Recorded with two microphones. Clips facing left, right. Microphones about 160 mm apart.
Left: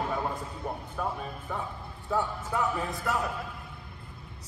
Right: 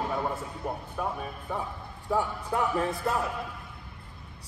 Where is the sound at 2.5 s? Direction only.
20° right (ahead or behind).